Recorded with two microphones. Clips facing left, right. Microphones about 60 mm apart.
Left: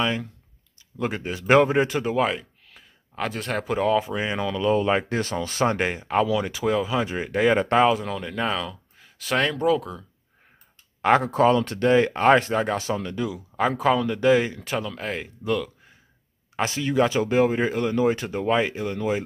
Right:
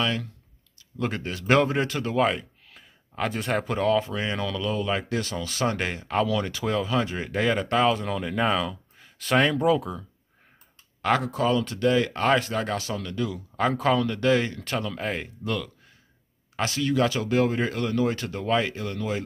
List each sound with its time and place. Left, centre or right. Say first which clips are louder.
0.0 s speech: left 2 dB; centre
2.1 s speech: even; centre
11.0 s speech: left 5 dB; left
12.1 s speech: left 5 dB; left
16.5 s speech: left 2 dB; left